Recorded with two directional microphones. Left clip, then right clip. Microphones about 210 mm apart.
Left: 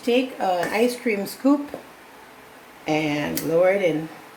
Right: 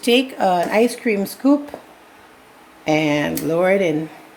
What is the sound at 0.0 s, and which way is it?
A woman's voice, 50° right (ahead or behind).